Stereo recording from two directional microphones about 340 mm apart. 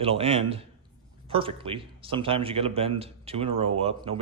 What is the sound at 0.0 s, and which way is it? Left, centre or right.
Speech, centre.